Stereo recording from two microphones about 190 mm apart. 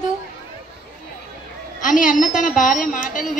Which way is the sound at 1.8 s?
45° left (ahead or behind).